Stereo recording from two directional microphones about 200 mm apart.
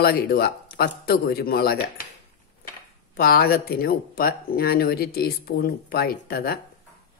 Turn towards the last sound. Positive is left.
turn(degrees=50)  # may be behind; listen again after turning